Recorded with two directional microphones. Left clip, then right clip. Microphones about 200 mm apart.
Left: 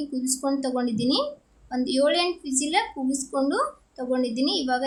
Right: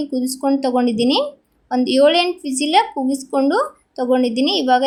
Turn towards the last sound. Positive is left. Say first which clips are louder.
# right 9 dB
turn(degrees=-25)  # may be behind; listen again after turning